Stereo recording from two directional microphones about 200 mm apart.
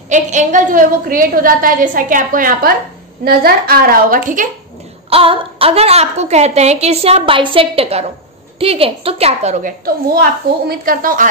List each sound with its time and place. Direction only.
0.1 s a woman's voice: 40° right (ahead or behind)
5.1 s a woman's voice: 30° right (ahead or behind); by 11.2 s 45° right (ahead or behind)